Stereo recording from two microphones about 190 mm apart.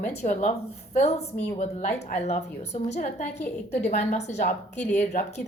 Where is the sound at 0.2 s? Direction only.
40° left (ahead or behind).